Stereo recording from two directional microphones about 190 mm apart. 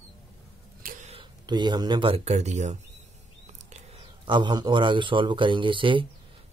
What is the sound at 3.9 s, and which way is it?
A man's voice, 25° right (ahead or behind).